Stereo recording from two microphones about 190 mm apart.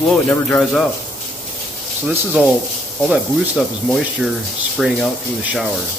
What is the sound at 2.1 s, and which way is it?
Speech, 5° right (ahead or behind).